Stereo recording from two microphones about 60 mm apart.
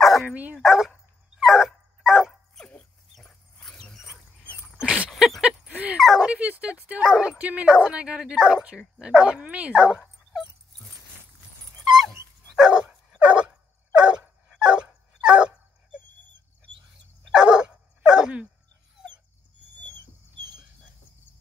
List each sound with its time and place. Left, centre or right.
0.0 s dog: centre
0.3 s dog: right
0.6 s speech: centre
1.4 s dog: centre
2.6 s dog: centre
3.9 s dog: centre
4.7 s dog: right
5.4 s a sound: right
5.9 s dog: centre
6.2 s speech: right
7.0 s speech: centre
12.5 s dog: centre
17.3 s dog: centre